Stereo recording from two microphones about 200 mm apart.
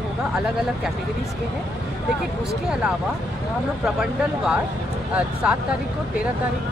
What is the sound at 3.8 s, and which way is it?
Speech, 5° right (ahead or behind).